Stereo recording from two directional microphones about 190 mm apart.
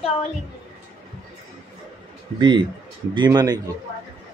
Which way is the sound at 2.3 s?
25° right (ahead or behind).